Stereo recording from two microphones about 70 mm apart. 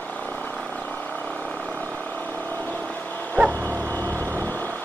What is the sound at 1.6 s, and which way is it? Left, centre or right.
Vehicle, right.